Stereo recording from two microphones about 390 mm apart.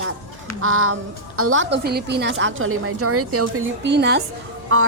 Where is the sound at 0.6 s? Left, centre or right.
Right.